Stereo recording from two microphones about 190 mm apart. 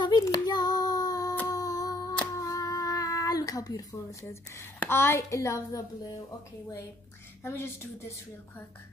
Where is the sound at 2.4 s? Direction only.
20° left (ahead or behind).